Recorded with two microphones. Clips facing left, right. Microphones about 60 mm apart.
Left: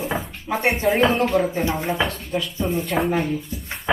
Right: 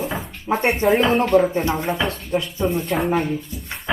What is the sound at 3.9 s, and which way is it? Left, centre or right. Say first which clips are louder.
Music: left 2 dB; centre.